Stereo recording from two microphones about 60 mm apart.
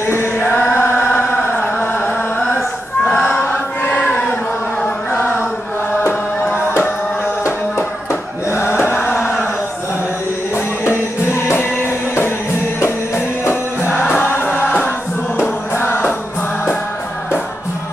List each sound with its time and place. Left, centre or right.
0.0 s chant: left
3.1 s a sound: centre
3.3 s chant: left
5.1 s chant: left
7.4 s music: left
8.9 s chant: left
10.5 s music: left
13.9 s music: left